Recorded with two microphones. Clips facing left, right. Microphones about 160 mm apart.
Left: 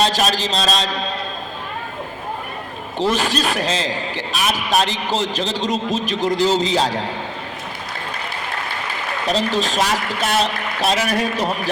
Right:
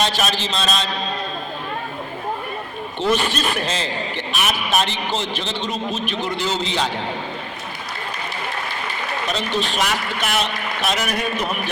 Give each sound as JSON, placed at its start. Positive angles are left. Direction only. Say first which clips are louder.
{"t": 0.0, "sound": "a man's voice", "louder": "left 3 dB", "side_deg": 35}
{"t": 3.0, "sound": "a man's voice", "louder": "left 1 dB", "side_deg": 35}
{"t": 9.3, "sound": "a man's voice", "louder": "left 5 dB", "side_deg": 40}